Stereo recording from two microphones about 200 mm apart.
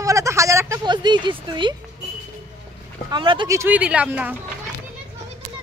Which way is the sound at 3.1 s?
25° right (ahead or behind).